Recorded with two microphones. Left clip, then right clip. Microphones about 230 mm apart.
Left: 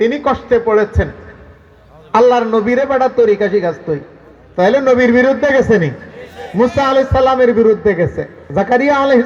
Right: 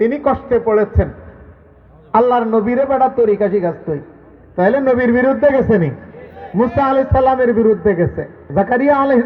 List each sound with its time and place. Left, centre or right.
0.0 s a man's voice: right
2.1 s a man's voice: right